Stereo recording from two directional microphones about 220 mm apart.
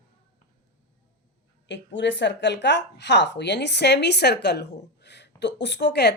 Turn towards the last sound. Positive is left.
turn(degrees=50)  # may be behind; listen again after turning